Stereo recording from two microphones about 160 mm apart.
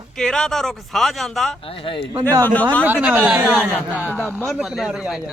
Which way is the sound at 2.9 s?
10° right (ahead or behind).